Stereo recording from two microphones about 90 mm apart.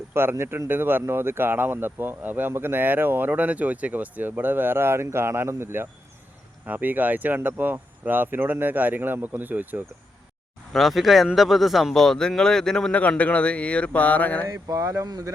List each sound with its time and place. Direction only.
0.1 s speech: 25° right (ahead or behind)
10.7 s a man's voice: centre (ahead or behind); by 14.4 s 15° left (ahead or behind)
14.4 s speech: 40° right (ahead or behind)